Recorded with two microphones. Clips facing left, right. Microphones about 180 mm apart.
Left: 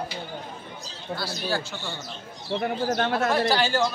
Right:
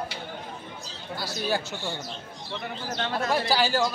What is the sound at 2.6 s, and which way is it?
Speech, 50° left (ahead or behind).